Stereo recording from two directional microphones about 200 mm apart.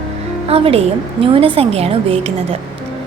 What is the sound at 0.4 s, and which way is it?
A woman's voice, 30° right (ahead or behind).